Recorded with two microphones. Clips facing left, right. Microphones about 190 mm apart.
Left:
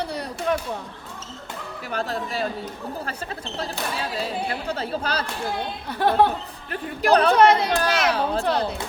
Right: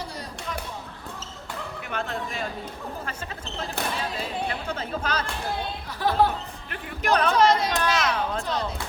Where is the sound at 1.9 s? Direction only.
35° left (ahead or behind).